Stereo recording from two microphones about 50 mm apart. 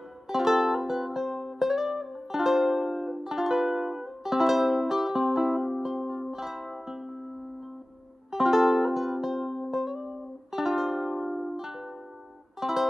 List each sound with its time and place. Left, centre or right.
0.3 s music: centre
8.3 s music: centre